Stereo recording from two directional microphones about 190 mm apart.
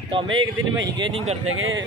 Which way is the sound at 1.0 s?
30° right (ahead or behind).